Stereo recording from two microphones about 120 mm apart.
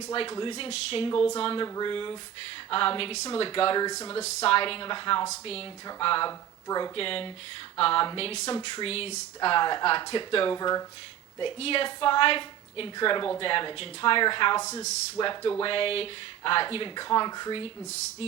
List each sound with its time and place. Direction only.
0.1 s speech: 45° left (ahead or behind)
1.6 s speech: 30° left (ahead or behind)
1.9 s speech: 45° left (ahead or behind)
4.2 s speech: 65° left (ahead or behind); by 5.2 s 45° left (ahead or behind)
5.3 s speech: 55° left (ahead or behind)
6.7 s speech: 30° left (ahead or behind)
6.9 s speech: 50° left (ahead or behind)
9.4 s speech: 45° left (ahead or behind)
10.6 s speech: 30° left (ahead or behind)
11.3 s speech: 50° left (ahead or behind)
14.6 s a man's voice: 25° left (ahead or behind)
15.2 s speech: 45° left (ahead or behind)